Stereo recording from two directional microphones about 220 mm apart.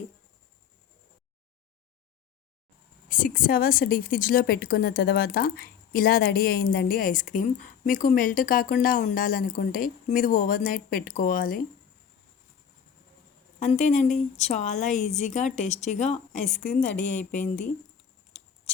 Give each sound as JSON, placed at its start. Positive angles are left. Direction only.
{"t": 3.1, "sound": "a woman's voice", "side_deg": 40}
{"t": 13.6, "sound": "a woman's voice", "side_deg": 35}
{"t": 16.9, "sound": "speech", "side_deg": 5}